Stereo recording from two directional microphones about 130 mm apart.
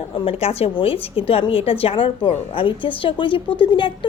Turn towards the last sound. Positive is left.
turn(degrees=40)  # may be behind; listen again after turning